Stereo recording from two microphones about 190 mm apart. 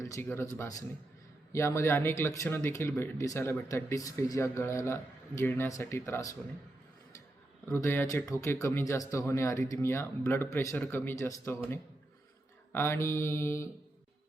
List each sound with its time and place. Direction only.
0.0 s speech: 15° left (ahead or behind)
7.6 s speech: 15° left (ahead or behind)
12.7 s speech: 15° left (ahead or behind)